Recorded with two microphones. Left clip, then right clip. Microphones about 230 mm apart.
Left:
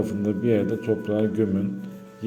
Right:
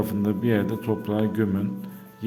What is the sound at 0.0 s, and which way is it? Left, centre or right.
A man's voice, right.